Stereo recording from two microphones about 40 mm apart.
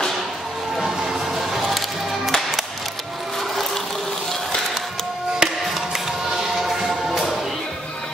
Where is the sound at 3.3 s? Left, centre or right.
Centre.